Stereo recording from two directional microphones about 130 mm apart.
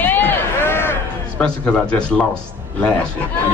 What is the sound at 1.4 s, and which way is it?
Speech, 5° left (ahead or behind).